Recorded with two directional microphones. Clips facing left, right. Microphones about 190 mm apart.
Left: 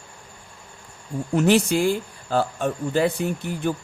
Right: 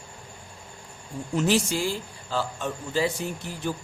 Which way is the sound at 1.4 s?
60° left (ahead or behind).